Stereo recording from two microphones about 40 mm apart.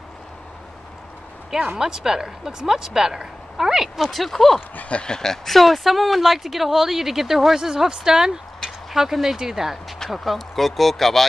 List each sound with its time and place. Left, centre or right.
1.8 s speech: centre
4.1 s speech: centre
4.6 s speech: left
4.9 s speech: centre